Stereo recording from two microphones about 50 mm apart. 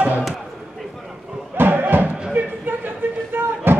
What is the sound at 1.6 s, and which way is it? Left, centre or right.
Music, right.